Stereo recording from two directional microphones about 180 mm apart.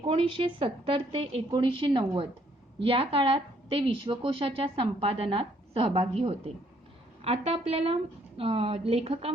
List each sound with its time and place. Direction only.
0.0 s a woman's voice: 30° right (ahead or behind)